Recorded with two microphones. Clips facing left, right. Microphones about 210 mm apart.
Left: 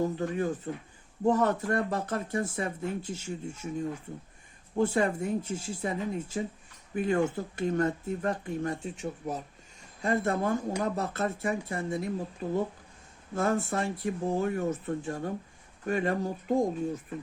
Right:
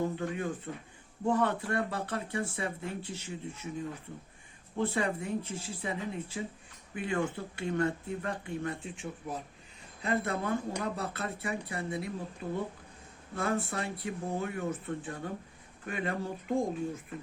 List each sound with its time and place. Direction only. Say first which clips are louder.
0.2 s speech: left 4 dB; 40° left (ahead or behind)
4.8 s speech: left 5 dB; 45° left (ahead or behind)